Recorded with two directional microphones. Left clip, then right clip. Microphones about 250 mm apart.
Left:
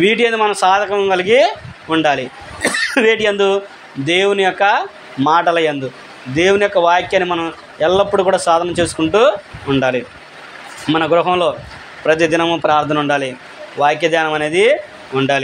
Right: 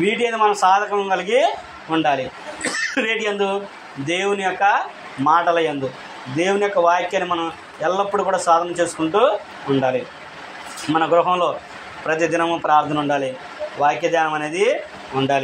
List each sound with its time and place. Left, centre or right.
0.0 s a man's voice: left